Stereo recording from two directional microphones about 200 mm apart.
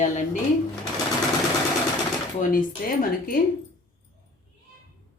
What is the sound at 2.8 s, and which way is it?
Speech, 45° left (ahead or behind).